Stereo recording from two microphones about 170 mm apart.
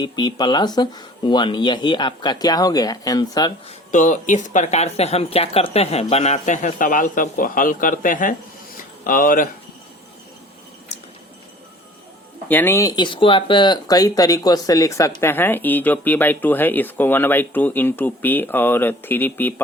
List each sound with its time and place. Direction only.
0.0 s speech: 25° left (ahead or behind)
3.7 s speech: 45° left (ahead or behind)
12.5 s speech: 10° left (ahead or behind)